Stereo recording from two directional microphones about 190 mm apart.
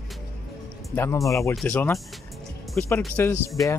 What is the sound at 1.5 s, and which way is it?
Speech, 5° left (ahead or behind).